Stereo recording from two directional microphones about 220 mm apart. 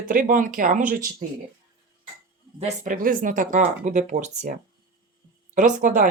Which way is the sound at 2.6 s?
40° right (ahead or behind).